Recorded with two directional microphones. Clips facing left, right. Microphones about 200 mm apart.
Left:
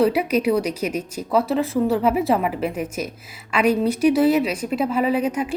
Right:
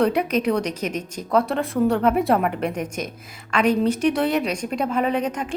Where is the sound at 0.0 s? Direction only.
5° left (ahead or behind).